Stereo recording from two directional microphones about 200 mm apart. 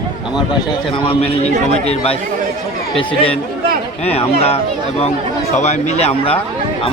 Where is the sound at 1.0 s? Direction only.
30° left (ahead or behind).